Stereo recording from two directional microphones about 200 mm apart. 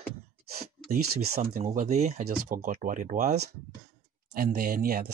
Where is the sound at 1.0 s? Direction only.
90° right.